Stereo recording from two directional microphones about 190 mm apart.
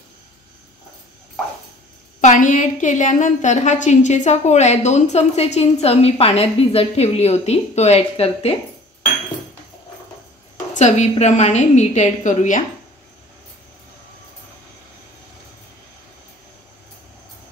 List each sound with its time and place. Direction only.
2.2 s a woman's voice: 45° left (ahead or behind)
10.7 s a woman's voice: 40° left (ahead or behind)